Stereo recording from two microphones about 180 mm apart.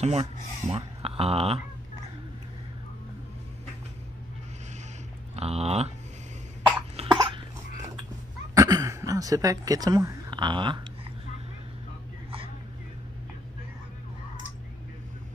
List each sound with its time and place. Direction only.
0.0 s speech: 35° right (ahead or behind)
5.3 s speech: 35° right (ahead or behind)
7.0 s cough: 30° right (ahead or behind)
8.5 s speech: 15° right (ahead or behind)